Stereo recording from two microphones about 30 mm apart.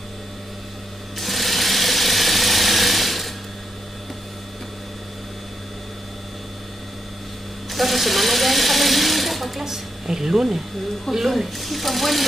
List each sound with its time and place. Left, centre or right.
1.1 s a sound: centre
7.7 s speech: centre
9.7 s speech: centre
11.1 s speech: centre